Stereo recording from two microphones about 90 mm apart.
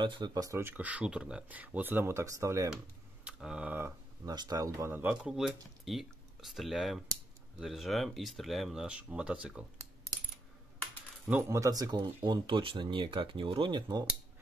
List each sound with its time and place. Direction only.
0.0 s speech: 60° right (ahead or behind)
0.3 s speech: 40° right (ahead or behind)
0.7 s speech: 15° right (ahead or behind); by 2.7 s 40° right (ahead or behind)
3.3 s speech: 10° right (ahead or behind)
4.3 s speech: 45° right (ahead or behind)
4.9 s speech: 20° right (ahead or behind)
5.3 s speech: 5° right (ahead or behind)
8.8 s speech: 10° right (ahead or behind)
11.4 s speech: 35° right (ahead or behind)
12.3 s speech: 65° right (ahead or behind)